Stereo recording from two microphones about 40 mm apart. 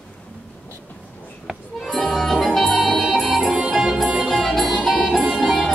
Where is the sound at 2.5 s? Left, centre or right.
Centre.